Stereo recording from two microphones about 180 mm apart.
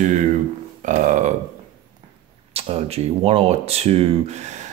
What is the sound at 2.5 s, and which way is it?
Speech, 35° right (ahead or behind).